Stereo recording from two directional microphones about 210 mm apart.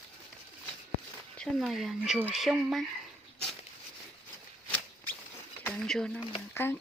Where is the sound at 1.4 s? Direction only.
Centre (ahead or behind).